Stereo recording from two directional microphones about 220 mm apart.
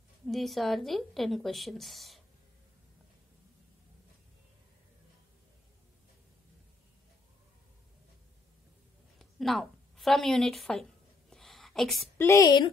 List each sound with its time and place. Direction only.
0.3 s a woman's voice: centre (ahead or behind)
9.2 s a sound: centre (ahead or behind)
12.3 s speech: 15° left (ahead or behind)